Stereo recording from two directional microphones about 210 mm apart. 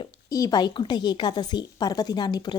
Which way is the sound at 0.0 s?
15° left (ahead or behind).